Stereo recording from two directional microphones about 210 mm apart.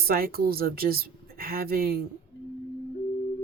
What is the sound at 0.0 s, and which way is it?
Speech, 45° right (ahead or behind).